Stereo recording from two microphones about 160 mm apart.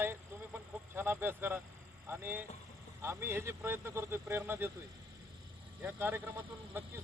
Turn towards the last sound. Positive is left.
turn(degrees=-10)  # may be behind; listen again after turning